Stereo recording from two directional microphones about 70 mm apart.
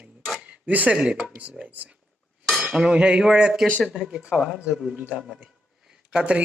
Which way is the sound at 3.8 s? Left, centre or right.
Centre.